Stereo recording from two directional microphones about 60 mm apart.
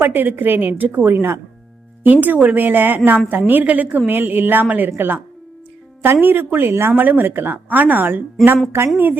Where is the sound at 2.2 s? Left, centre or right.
Right.